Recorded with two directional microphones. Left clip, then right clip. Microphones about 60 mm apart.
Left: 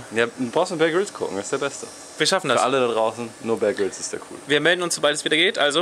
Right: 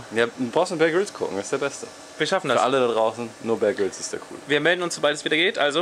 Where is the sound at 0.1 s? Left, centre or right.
Centre.